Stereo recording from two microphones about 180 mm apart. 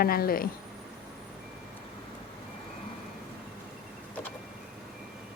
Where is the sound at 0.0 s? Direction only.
55° left (ahead or behind).